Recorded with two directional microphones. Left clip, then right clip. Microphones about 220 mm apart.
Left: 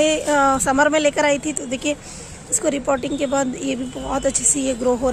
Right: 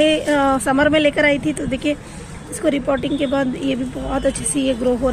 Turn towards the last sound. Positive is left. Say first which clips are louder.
# right 1 dB
turn(degrees=15)  # may be behind; listen again after turning